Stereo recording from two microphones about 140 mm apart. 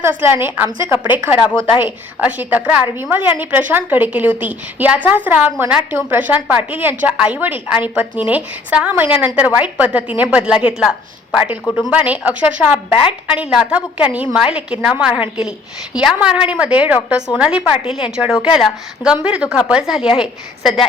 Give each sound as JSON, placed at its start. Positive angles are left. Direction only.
{"t": 0.0, "sound": "a woman's voice", "side_deg": -15}